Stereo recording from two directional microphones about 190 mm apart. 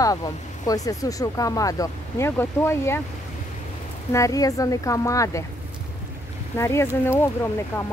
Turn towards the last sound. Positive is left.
turn(degrees=15)  # may be behind; listen again after turning